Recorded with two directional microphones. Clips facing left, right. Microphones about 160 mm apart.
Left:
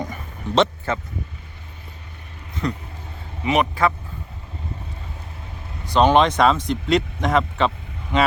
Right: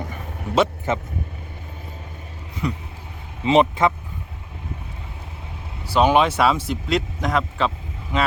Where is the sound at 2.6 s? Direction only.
10° right (ahead or behind).